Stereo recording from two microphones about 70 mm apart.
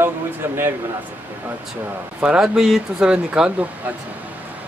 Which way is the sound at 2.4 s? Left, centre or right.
Centre.